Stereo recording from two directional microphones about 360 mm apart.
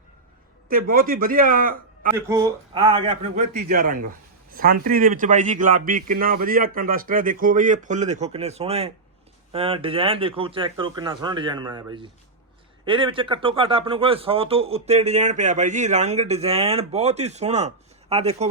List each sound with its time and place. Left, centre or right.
0.7 s a man's voice: right
2.1 s a man's voice: centre